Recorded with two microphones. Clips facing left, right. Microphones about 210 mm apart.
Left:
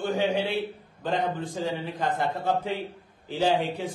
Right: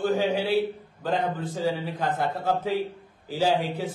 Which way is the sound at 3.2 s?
5° right (ahead or behind).